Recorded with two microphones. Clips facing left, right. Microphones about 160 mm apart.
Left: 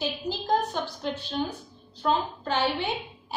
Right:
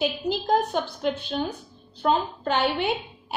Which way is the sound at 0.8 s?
60° right (ahead or behind).